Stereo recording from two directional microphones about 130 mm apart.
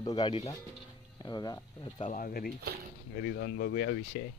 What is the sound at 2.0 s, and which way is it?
Speech, 85° left.